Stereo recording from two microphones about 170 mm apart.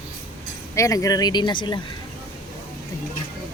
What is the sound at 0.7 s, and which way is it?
Speech, 20° left (ahead or behind).